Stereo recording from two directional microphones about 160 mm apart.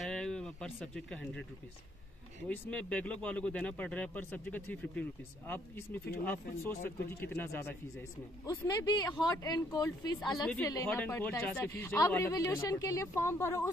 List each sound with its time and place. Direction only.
0.0 s a sound: 5° left (ahead or behind)
2.4 s speech: 10° left (ahead or behind)
6.2 s speech: 15° left (ahead or behind)
8.6 s speech: 25° left (ahead or behind)